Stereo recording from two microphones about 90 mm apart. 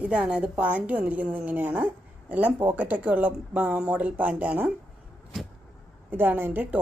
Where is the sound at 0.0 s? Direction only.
10° right (ahead or behind).